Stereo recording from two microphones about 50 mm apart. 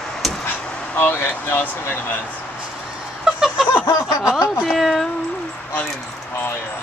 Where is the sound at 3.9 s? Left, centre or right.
Left.